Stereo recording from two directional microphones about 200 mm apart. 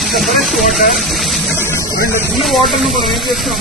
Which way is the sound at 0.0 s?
Centre (ahead or behind).